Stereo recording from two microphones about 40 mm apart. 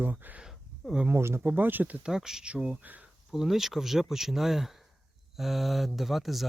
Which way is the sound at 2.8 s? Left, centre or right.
Right.